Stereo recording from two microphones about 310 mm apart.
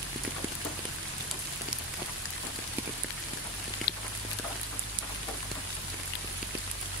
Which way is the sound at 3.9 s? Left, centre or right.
Left.